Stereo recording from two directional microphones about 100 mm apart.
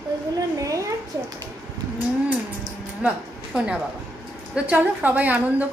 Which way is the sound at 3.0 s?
10° right (ahead or behind).